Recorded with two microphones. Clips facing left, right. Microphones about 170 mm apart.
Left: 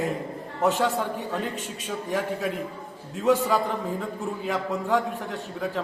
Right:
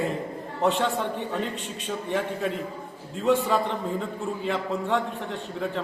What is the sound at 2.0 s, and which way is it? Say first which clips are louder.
A man's voice: even; centre (ahead or behind).